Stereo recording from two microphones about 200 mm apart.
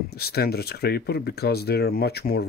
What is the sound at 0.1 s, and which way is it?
Speech, 50° left (ahead or behind).